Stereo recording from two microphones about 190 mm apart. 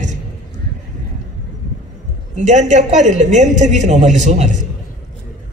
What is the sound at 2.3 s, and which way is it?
A woman's voice, 40° right (ahead or behind).